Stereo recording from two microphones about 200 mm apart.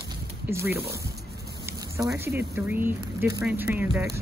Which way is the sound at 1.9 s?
15° right (ahead or behind).